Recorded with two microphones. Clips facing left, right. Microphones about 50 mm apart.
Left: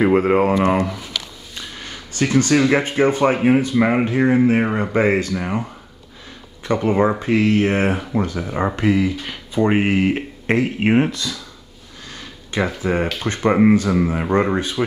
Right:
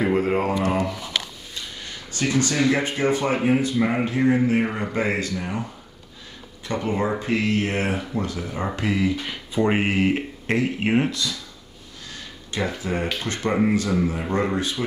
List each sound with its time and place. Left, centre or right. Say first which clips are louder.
0.1 s speech: left 6 dB; left
6.7 s speech: left 7 dB; left
12.5 s speech: left 6 dB; left